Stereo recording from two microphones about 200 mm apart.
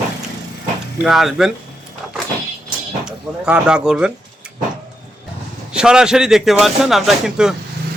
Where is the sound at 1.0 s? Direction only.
Centre (ahead or behind).